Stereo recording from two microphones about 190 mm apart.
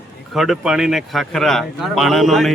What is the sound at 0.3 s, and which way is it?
A man's voice, centre (ahead or behind).